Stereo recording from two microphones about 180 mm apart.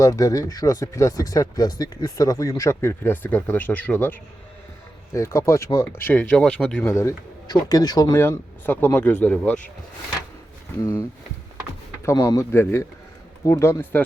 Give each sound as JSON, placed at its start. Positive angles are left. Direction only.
{"t": 0.0, "sound": "speech", "side_deg": 20}
{"t": 10.8, "sound": "speech", "side_deg": 15}
{"t": 12.0, "sound": "speech", "side_deg": 20}